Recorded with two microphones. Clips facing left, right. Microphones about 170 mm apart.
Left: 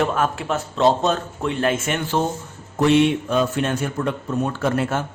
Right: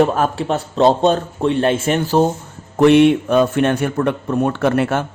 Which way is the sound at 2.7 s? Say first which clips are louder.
Right 6 dB; 60° right (ahead or behind).